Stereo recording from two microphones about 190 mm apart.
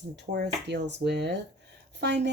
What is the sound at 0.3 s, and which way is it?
Speech, 60° right (ahead or behind).